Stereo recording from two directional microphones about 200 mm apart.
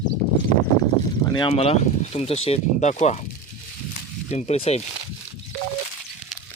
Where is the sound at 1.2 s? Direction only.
20° left (ahead or behind).